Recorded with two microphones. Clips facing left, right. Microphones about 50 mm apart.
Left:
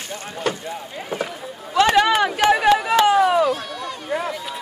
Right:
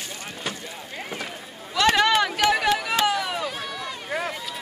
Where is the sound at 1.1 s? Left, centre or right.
Centre.